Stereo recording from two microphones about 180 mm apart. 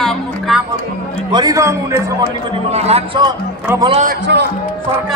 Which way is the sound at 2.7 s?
35° right (ahead or behind).